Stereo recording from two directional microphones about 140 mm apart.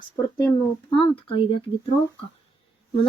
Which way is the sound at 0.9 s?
40° left (ahead or behind).